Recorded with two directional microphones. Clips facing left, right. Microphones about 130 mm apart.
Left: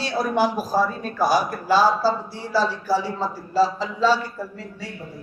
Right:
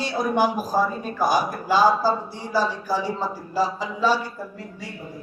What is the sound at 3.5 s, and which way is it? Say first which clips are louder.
Speech: left 5 dB; 15° right (ahead or behind).